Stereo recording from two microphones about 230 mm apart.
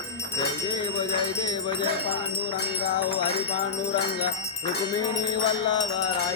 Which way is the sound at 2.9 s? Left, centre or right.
Centre.